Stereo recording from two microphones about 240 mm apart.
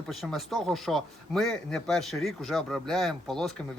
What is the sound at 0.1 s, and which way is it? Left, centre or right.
Speech, centre.